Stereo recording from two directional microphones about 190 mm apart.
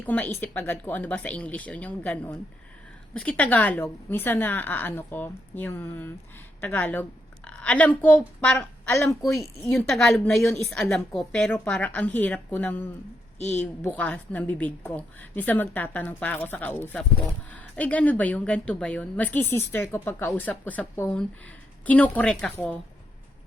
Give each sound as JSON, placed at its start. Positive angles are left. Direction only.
{"t": 0.0, "sound": "a woman's voice", "side_deg": 10}
{"t": 13.4, "sound": "a woman's voice", "side_deg": 35}
{"t": 13.8, "sound": "a woman's voice", "side_deg": 5}